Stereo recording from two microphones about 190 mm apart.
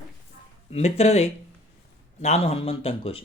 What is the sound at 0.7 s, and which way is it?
Speech, 35° left (ahead or behind).